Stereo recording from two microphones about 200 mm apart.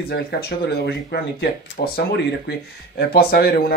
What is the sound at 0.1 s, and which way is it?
Speech, 50° left (ahead or behind).